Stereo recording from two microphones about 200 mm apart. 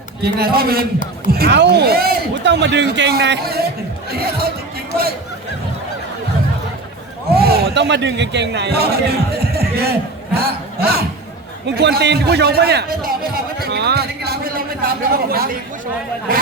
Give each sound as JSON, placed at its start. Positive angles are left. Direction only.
{"t": 0.2, "sound": "a man's voice", "side_deg": -50}
{"t": 7.3, "sound": "a man's voice", "side_deg": -50}